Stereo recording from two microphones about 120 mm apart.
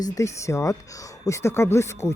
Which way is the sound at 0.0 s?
30° left (ahead or behind).